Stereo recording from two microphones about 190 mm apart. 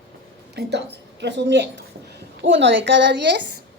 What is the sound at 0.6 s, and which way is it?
A woman's voice, 60° right (ahead or behind).